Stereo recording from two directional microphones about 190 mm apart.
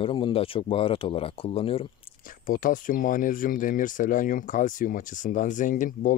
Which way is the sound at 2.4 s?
45° left (ahead or behind).